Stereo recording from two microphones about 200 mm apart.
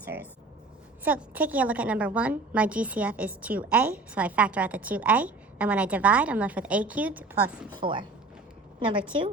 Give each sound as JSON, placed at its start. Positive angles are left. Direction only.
{"t": 0.0, "sound": "a woman's voice", "side_deg": -10}
{"t": 7.8, "sound": "a woman's voice", "side_deg": -25}